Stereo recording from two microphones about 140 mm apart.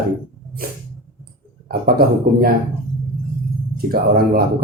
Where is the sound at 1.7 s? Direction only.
90° right.